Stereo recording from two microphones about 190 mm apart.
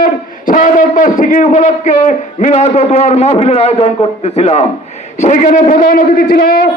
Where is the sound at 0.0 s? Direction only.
45° left (ahead or behind).